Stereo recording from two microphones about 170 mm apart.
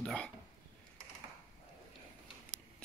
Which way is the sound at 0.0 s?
5° left (ahead or behind).